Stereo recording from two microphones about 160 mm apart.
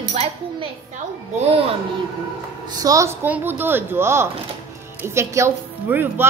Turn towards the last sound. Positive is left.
turn(degrees=-15)  # may be behind; listen again after turning